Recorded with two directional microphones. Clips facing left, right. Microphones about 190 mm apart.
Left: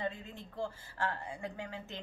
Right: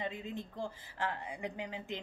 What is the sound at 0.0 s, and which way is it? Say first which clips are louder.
Speech: even; 20° right (ahead or behind).